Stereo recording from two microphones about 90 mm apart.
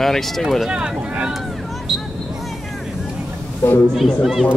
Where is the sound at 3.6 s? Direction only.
20° left (ahead or behind).